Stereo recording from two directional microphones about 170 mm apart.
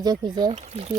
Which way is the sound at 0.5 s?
40° right (ahead or behind).